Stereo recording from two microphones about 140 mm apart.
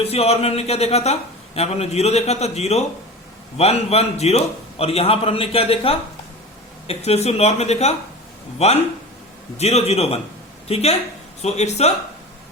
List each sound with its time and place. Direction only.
0.0 s speech: 50° left (ahead or behind)